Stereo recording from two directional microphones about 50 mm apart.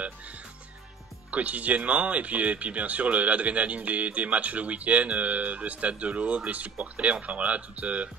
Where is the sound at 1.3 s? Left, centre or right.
Right.